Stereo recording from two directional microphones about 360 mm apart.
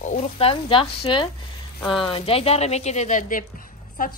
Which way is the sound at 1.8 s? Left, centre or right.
Centre.